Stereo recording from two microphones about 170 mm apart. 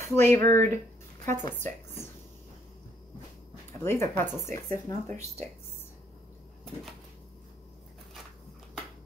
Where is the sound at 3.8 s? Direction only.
15° left (ahead or behind).